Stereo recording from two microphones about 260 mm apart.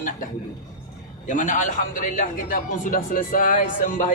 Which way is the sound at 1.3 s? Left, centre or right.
Left.